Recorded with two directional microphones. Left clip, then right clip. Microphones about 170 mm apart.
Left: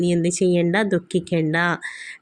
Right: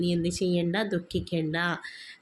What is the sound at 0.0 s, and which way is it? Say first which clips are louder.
Speech: left 8 dB; 30° left (ahead or behind).